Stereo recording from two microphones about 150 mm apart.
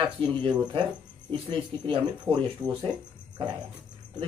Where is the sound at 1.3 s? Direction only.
35° right (ahead or behind).